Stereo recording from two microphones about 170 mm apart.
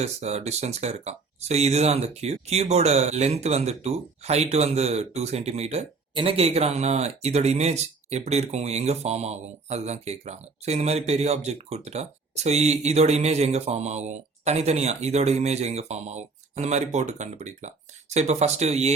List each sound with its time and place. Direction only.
0.0 s speech: 40° right (ahead or behind)